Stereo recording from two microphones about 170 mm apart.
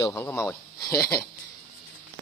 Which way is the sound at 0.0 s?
15° left (ahead or behind).